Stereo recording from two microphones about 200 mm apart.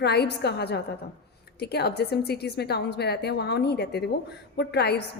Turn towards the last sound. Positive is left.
turn(degrees=55)  # may be behind; listen again after turning